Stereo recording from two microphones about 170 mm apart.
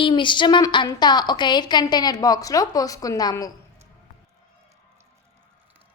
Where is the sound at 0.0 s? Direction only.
30° left (ahead or behind).